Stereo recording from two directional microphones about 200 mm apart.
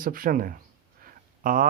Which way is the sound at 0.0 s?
45° right (ahead or behind).